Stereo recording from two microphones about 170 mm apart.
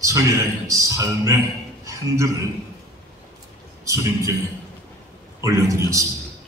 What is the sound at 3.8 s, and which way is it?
Speech, 20° right (ahead or behind).